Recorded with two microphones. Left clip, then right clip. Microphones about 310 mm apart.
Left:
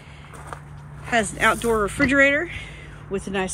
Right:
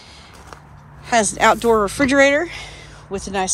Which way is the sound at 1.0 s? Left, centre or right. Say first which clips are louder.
Right 5 dB; centre.